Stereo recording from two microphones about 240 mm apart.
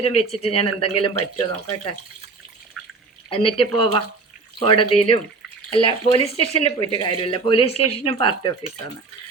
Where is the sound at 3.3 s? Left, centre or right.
Left.